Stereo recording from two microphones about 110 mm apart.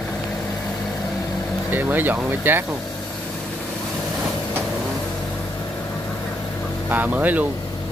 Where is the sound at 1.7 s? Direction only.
20° right (ahead or behind).